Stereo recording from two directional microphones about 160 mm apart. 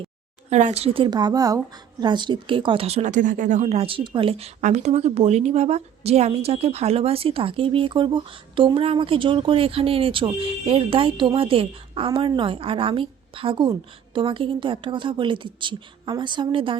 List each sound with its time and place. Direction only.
0.5 s a woman's voice: 45° right (ahead or behind)